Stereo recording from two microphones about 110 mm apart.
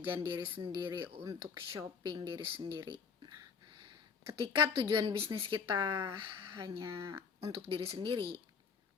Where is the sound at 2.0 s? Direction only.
45° right (ahead or behind).